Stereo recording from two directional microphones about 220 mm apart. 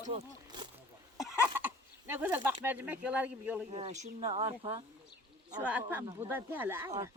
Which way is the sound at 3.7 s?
30° right (ahead or behind).